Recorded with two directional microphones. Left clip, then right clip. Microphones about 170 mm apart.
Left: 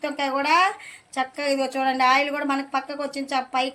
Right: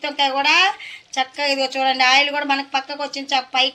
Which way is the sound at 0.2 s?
50° left (ahead or behind).